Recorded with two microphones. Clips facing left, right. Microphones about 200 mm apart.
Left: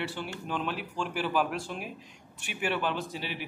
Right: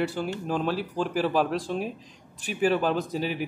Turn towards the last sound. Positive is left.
turn(degrees=-40)  # may be behind; listen again after turning